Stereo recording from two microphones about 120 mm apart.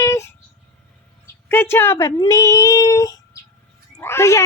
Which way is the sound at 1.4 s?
20° left (ahead or behind).